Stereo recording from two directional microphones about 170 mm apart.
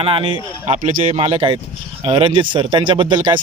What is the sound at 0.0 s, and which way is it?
Speech, 30° right (ahead or behind).